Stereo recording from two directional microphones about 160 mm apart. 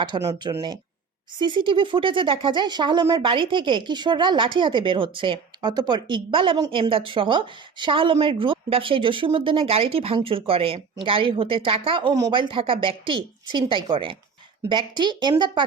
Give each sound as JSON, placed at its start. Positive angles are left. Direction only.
{"t": 0.2, "sound": "speech", "side_deg": -20}
{"t": 1.4, "sound": "a woman's voice", "side_deg": -30}